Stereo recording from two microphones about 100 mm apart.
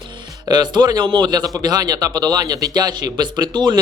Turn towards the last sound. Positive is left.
turn(degrees=-45)  # may be behind; listen again after turning